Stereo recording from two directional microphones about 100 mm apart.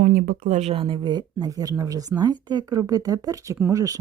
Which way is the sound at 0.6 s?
70° right (ahead or behind).